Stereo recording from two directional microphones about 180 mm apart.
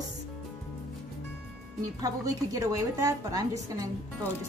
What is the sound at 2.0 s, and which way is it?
A woman's voice, 20° right (ahead or behind).